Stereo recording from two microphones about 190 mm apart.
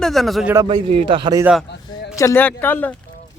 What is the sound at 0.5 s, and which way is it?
Speech, 20° right (ahead or behind).